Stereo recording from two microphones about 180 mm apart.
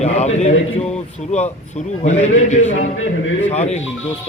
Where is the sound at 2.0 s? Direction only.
40° left (ahead or behind).